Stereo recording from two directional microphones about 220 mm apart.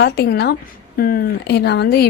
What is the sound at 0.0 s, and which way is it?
A woman's voice, 45° left (ahead or behind).